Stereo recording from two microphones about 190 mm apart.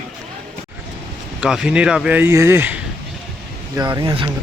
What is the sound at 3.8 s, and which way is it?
Speech, 20° right (ahead or behind).